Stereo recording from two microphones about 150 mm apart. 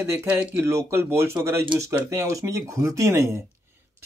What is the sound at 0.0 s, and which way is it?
Speech, 20° right (ahead or behind).